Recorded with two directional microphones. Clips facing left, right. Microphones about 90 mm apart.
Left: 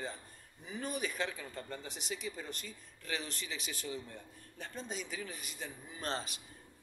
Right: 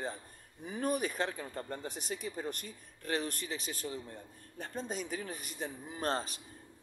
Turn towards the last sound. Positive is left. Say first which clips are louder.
# right 5 dB
turn(degrees=-40)  # may be behind; listen again after turning